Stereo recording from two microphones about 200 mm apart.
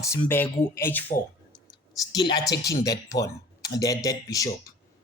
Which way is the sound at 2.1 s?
20° left (ahead or behind).